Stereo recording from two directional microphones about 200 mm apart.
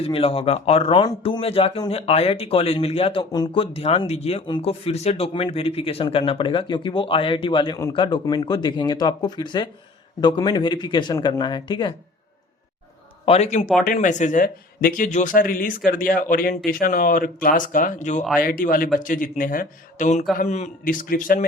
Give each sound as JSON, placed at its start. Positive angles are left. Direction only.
{"t": 0.0, "sound": "speech", "side_deg": 30}
{"t": 13.2, "sound": "a man's voice", "side_deg": 30}